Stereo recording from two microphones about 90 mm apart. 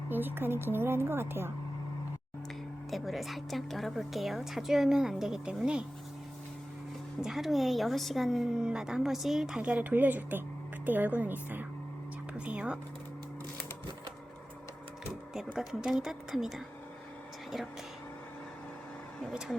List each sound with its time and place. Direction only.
0.1 s a woman's voice: 20° right (ahead or behind)
2.9 s speech: centre (ahead or behind)
7.2 s a woman's voice: 5° right (ahead or behind)
15.5 s speech: 5° right (ahead or behind)